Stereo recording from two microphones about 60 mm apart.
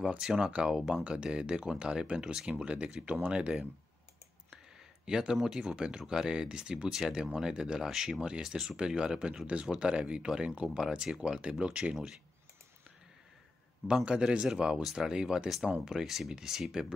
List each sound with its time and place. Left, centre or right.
0.0 s speech: centre
5.0 s speech: centre
7.0 s speech: centre
14.0 s speech: centre